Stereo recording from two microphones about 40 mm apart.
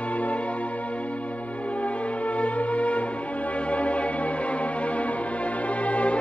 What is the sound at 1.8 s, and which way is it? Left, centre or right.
Music, left.